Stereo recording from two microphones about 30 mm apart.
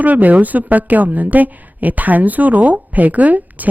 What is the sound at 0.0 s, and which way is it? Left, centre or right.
A woman's voice, right.